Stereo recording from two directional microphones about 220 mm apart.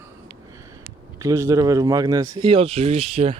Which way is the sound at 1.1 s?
15° right (ahead or behind).